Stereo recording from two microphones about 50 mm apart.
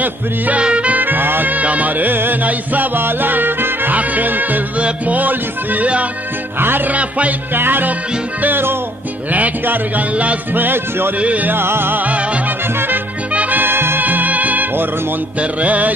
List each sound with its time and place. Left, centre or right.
0.6 s music: right
3.9 s music: right
4.8 s a man's voice: right
7.5 s music: right
9.3 s a man's voice: right
11.1 s music: right
11.5 s music: right
12.0 s music: right
12.7 s music: right
13.3 s music: right
13.6 s music: right
14.0 s music: right
15.3 s music: right